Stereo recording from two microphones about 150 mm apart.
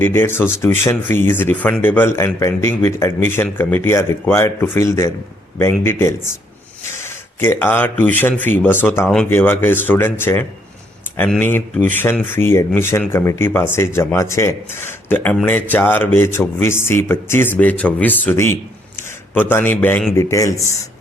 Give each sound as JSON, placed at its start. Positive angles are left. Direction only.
{"t": 0.0, "sound": "speech", "side_deg": 15}